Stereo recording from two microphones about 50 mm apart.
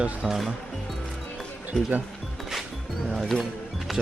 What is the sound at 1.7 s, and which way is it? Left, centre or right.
Speech, right.